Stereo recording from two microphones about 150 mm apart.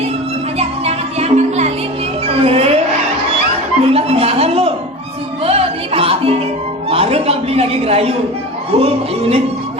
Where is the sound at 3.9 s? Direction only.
40° right (ahead or behind).